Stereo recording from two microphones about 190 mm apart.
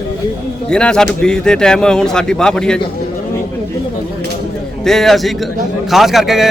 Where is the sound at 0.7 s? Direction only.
5° left (ahead or behind).